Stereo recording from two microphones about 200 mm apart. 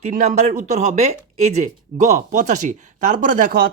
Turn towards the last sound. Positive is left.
turn(degrees=-45)  # may be behind; listen again after turning